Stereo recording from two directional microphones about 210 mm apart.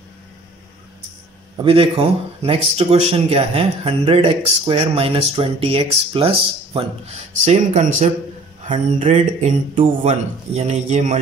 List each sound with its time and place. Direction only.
1.6 s speech: 25° right (ahead or behind)